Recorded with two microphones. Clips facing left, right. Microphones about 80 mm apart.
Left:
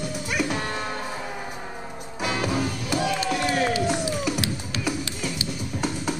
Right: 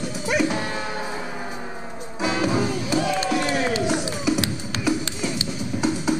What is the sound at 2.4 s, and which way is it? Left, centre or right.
Music, right.